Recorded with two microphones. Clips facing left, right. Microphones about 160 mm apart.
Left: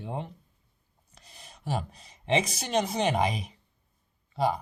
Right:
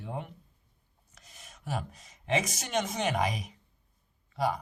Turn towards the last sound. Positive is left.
turn(degrees=30)  # may be behind; listen again after turning